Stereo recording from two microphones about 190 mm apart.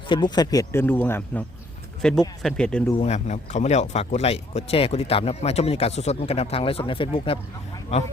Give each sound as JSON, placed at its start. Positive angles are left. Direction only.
{"t": 0.1, "sound": "speech", "side_deg": 20}
{"t": 3.0, "sound": "speech", "side_deg": 35}